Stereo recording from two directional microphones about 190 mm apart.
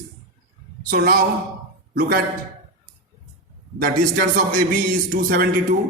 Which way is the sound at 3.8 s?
45° right (ahead or behind).